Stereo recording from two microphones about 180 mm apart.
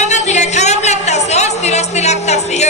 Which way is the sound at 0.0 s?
40° left (ahead or behind).